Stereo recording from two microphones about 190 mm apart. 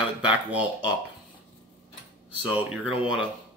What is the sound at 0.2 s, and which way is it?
Speech, 5° right (ahead or behind).